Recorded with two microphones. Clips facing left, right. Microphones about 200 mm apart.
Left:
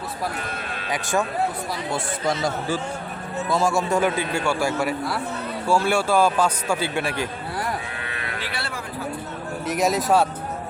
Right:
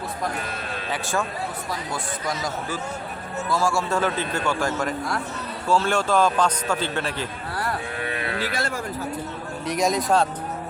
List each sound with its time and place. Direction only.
1.9 s a man's voice: 30° left (ahead or behind); by 7.3 s 10° left (ahead or behind)
8.3 s cattle: 45° right (ahead or behind)
9.6 s speech: 5° left (ahead or behind)